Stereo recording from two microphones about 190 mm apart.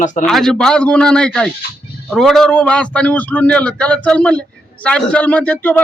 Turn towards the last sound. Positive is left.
turn(degrees=10)  # may be behind; listen again after turning